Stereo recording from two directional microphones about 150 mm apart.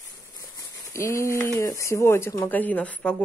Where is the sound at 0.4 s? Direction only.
20° left (ahead or behind).